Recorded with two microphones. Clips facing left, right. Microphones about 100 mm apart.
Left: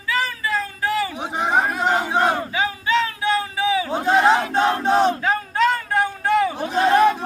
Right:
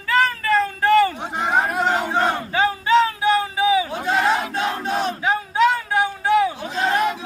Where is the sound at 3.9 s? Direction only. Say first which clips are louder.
Left 3 dB; 25° left (ahead or behind).